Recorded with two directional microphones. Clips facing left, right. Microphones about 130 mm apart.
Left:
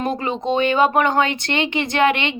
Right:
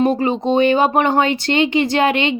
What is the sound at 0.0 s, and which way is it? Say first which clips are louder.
Speech: right 6 dB; 35° right (ahead or behind).